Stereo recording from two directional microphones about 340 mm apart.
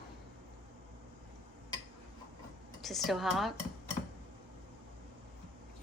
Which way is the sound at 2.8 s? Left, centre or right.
Centre.